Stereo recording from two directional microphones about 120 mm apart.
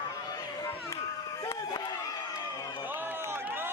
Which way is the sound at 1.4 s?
30° left (ahead or behind).